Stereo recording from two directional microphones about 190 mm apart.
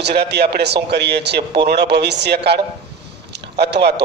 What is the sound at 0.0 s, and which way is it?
A man's voice, 60° right (ahead or behind).